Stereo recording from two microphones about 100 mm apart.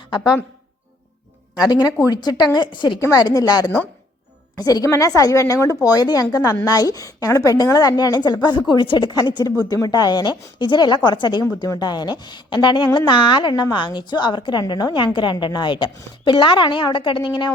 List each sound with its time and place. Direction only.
0.1 s speech: 55° left (ahead or behind)
2.0 s a woman's voice: 45° left (ahead or behind)
3.0 s a woman's voice: 35° left (ahead or behind); by 17.5 s 55° left (ahead or behind)